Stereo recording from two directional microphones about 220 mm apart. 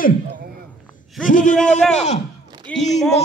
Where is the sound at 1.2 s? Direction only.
35° left (ahead or behind).